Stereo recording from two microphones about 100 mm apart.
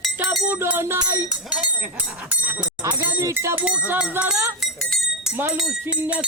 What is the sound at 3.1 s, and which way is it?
Speech, 30° right (ahead or behind).